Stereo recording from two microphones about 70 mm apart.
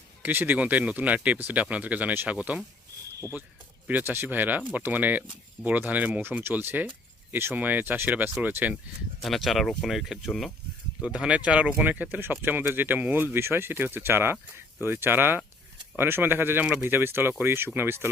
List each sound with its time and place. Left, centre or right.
0.2 s speech: right
3.8 s speech: right
9.2 s speech: centre
11.0 s speech: centre; by 18.1 s right